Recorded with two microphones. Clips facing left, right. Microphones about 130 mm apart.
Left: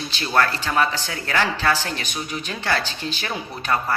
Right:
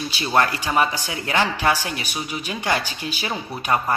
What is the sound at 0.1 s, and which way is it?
A man's voice, 10° right (ahead or behind).